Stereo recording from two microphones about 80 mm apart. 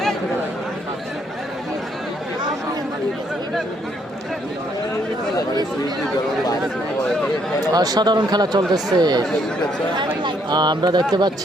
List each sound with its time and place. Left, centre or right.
7.7 s speech: right
9.9 s speech: right